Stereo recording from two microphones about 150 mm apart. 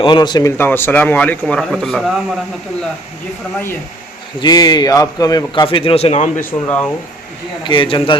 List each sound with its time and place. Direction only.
0.0 s a man's voice: 30° left (ahead or behind)
0.5 s a man's voice: 15° left (ahead or behind)
4.4 s a man's voice: 25° left (ahead or behind)
5.6 s a man's voice: 40° left (ahead or behind); by 6.5 s 55° left (ahead or behind)
6.5 s a man's voice: 10° left (ahead or behind)
7.6 s a man's voice: 35° left (ahead or behind)